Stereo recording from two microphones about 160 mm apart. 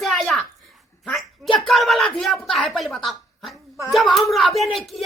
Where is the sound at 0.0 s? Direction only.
Centre (ahead or behind).